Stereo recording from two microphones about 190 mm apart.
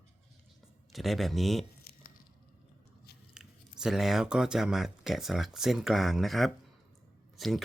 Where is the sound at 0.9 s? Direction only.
Centre (ahead or behind).